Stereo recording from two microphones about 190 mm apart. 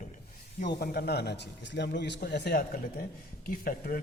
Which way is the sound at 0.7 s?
55° left (ahead or behind).